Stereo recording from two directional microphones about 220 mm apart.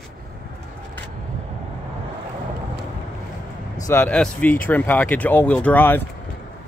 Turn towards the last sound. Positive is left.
turn(degrees=10)  # may be behind; listen again after turning